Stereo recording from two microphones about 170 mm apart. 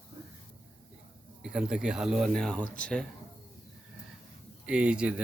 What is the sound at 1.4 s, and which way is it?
Speech, 5° right (ahead or behind).